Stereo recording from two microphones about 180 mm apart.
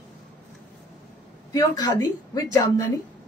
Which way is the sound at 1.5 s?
20° left (ahead or behind).